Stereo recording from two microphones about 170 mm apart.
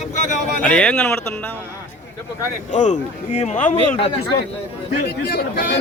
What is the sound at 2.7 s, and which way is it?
Speech, 45° left (ahead or behind).